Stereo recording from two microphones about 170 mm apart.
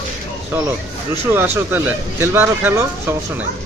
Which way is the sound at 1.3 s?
10° right (ahead or behind).